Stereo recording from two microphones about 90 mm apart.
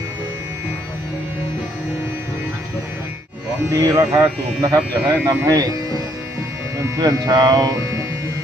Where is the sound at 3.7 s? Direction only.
35° right (ahead or behind).